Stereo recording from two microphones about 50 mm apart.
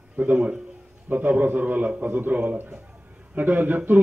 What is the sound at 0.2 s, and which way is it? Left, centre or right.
A man's voice, right.